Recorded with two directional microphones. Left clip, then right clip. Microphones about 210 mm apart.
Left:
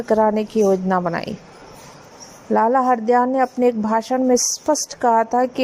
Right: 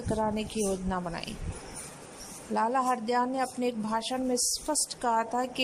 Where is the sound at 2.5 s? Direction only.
30° left (ahead or behind).